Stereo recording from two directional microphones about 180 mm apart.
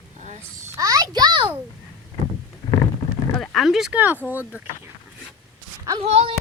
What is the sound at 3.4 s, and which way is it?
A woman's voice, centre (ahead or behind).